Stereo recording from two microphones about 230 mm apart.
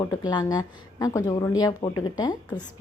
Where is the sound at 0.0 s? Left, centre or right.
Centre.